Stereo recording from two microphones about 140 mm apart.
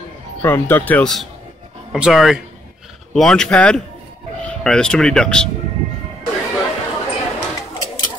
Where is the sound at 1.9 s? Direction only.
Centre (ahead or behind).